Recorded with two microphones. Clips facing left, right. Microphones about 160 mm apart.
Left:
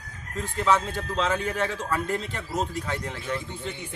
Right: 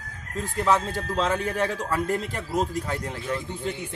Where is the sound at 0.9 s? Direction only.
35° right (ahead or behind).